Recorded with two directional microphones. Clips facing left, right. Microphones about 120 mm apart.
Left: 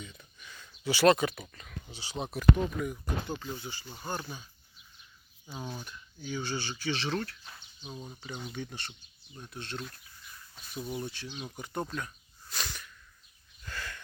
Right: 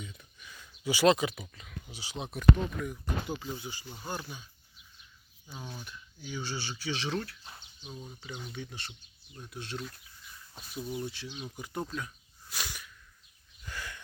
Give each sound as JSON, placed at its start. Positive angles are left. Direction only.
{"t": 0.0, "sound": "speech", "side_deg": -5}
{"t": 3.2, "sound": "speech", "side_deg": -10}
{"t": 5.5, "sound": "speech", "side_deg": 15}
{"t": 5.8, "sound": "speech", "side_deg": -10}
{"t": 7.8, "sound": "speech", "side_deg": 20}
{"t": 8.2, "sound": "speech", "side_deg": 0}
{"t": 10.8, "sound": "speech", "side_deg": 15}
{"t": 11.0, "sound": "speech", "side_deg": 0}
{"t": 13.6, "sound": "a sound", "side_deg": -15}